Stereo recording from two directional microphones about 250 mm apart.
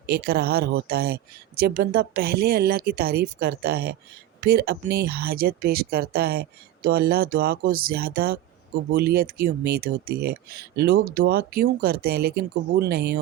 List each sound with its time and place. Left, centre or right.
0.0 s speech: right